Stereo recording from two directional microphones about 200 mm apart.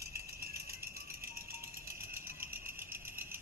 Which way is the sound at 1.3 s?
50° right (ahead or behind).